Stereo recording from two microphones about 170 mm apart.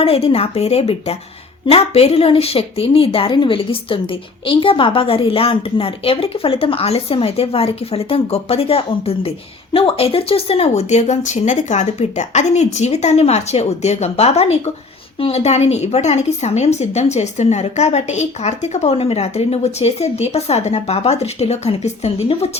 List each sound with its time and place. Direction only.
0.0 s a woman's voice: 35° left (ahead or behind)